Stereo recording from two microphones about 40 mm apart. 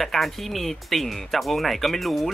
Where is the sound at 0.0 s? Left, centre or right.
Centre.